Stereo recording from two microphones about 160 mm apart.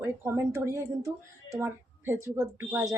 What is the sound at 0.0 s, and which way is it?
A woman's voice, 15° right (ahead or behind).